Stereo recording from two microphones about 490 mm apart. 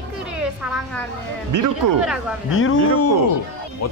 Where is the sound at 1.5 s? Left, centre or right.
Right.